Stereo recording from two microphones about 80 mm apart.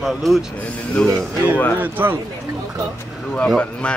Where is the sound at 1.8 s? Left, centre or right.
Right.